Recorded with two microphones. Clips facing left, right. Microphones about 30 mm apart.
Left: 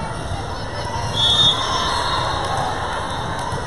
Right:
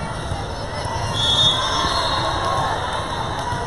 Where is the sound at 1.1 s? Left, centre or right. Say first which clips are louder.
Left 2 dB; centre.